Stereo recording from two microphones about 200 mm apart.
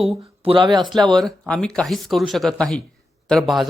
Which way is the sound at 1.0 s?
Centre (ahead or behind).